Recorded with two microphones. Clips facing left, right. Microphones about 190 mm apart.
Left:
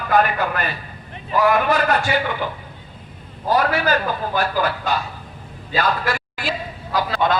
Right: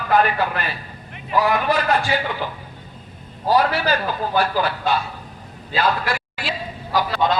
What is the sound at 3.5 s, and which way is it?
A man's voice, 50° left (ahead or behind).